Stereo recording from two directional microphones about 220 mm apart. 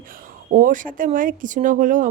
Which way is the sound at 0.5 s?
35° right (ahead or behind).